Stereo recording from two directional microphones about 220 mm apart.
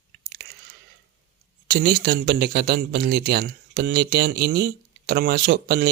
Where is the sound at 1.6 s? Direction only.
45° right (ahead or behind).